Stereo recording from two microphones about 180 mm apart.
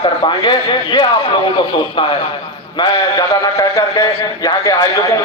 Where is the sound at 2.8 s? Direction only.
20° left (ahead or behind).